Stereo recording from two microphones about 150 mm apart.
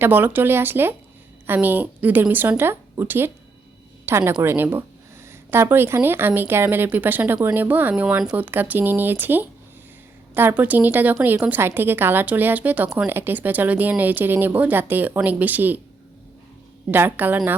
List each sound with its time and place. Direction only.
0.0 s a woman's voice: 15° right (ahead or behind)
16.9 s a woman's voice: 15° right (ahead or behind)